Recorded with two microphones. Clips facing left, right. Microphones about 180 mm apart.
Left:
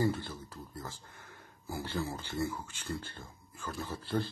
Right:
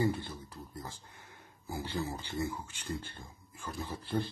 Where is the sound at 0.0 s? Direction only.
15° right (ahead or behind).